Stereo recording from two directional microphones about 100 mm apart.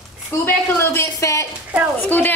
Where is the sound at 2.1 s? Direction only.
20° left (ahead or behind).